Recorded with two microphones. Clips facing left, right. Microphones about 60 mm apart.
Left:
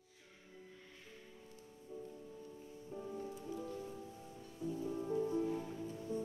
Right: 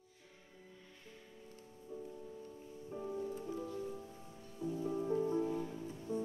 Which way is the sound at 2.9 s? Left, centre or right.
Centre.